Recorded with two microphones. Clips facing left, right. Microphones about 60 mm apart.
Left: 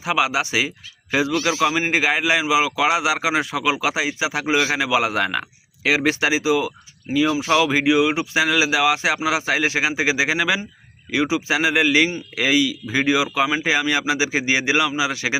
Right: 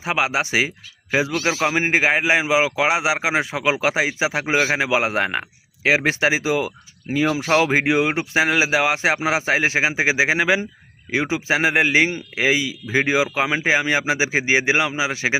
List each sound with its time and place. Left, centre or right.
0.0 s a man's voice: right